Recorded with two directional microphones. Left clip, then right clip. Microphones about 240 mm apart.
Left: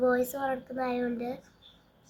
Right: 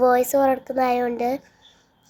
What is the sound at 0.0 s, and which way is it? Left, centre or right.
A child's voice, right.